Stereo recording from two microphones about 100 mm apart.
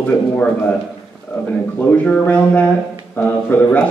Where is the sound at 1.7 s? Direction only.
10° left (ahead or behind).